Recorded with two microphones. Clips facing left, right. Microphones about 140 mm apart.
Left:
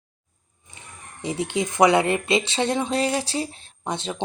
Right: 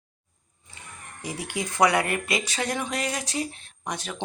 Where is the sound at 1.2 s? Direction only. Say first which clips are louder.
Left 7 dB; 25° left (ahead or behind).